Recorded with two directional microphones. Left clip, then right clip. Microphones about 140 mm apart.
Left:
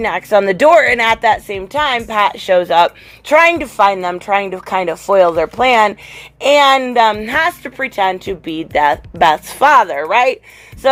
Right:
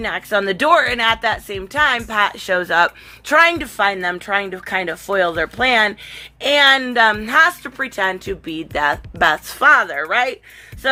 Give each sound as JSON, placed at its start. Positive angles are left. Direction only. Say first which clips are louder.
{"t": 0.0, "sound": "speech", "louder": "left 7 dB", "side_deg": 25}
{"t": 0.7, "sound": "speech", "louder": "left 4 dB", "side_deg": 15}
{"t": 0.9, "sound": "speech", "louder": "left 5 dB", "side_deg": 30}
{"t": 1.7, "sound": "speech", "louder": "left 1 dB", "side_deg": 10}
{"t": 6.8, "sound": "a woman's voice", "louder": "left 3 dB", "side_deg": 0}